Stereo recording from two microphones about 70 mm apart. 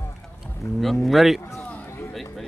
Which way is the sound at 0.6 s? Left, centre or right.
Left.